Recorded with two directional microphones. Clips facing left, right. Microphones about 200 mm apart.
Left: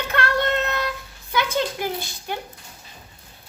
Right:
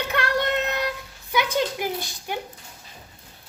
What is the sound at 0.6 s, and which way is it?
Child singing, 15° right (ahead or behind).